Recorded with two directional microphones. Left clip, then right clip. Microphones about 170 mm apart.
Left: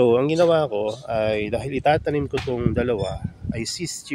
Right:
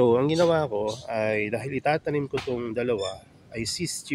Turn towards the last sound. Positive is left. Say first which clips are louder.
# left 2 dB
turn(degrees=15)  # may be behind; listen again after turning